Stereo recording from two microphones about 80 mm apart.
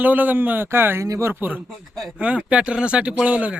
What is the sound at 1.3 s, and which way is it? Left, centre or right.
Speech, right.